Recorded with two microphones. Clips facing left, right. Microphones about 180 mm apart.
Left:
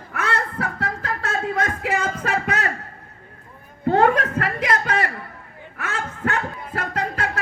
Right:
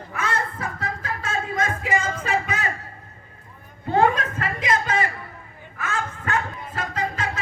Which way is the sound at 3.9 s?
65° left (ahead or behind).